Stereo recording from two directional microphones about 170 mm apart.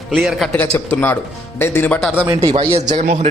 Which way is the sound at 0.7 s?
10° left (ahead or behind).